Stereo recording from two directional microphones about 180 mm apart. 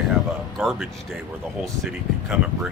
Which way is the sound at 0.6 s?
Centre (ahead or behind).